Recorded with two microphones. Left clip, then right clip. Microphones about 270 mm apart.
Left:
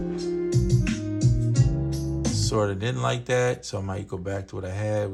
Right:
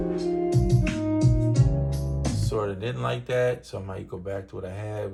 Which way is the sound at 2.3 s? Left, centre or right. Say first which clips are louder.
Left 3 dB; left.